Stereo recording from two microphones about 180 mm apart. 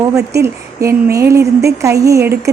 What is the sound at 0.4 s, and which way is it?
A woman's voice, 15° right (ahead or behind).